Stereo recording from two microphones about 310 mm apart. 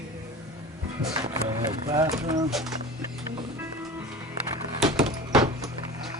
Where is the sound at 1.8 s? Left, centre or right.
Centre.